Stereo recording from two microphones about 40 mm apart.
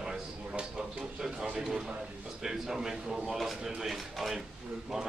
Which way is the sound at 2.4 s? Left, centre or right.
Centre.